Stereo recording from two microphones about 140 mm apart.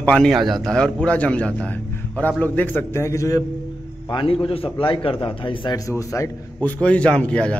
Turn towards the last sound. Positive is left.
turn(degrees=10)  # may be behind; listen again after turning